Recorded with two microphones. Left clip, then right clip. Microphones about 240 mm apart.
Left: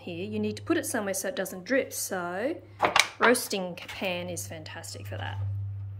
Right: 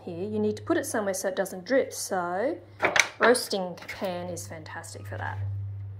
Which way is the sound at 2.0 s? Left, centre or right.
Left.